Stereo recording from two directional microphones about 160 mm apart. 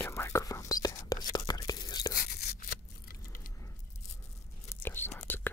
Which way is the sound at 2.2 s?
65° left (ahead or behind).